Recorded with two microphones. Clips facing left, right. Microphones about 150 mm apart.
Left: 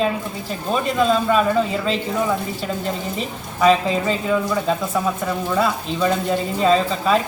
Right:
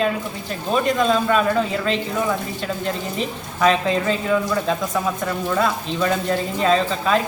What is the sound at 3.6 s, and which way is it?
Speech, 5° left (ahead or behind).